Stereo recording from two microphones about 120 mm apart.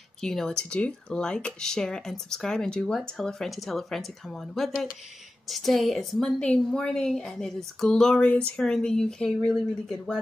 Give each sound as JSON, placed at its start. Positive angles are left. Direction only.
{"t": 0.2, "sound": "a woman's voice", "side_deg": 5}